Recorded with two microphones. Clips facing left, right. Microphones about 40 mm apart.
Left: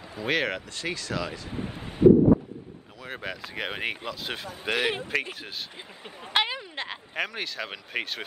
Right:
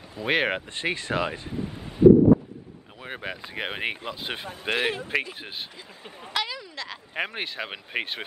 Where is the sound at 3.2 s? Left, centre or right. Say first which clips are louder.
Right 1 dB; centre.